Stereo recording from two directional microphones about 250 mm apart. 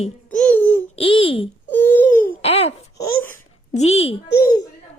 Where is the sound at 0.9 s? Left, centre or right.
Left.